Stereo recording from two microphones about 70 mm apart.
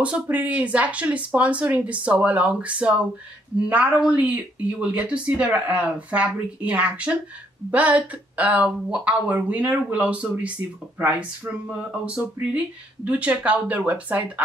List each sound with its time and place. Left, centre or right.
0.0 s speech: right